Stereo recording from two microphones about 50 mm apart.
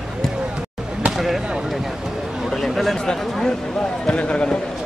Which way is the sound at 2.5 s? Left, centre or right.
Centre.